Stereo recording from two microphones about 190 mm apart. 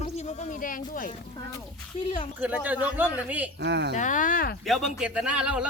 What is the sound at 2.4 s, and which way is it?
Speech, 10° right (ahead or behind).